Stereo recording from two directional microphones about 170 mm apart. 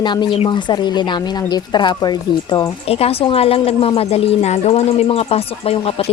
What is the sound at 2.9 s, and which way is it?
Speech, 35° left (ahead or behind).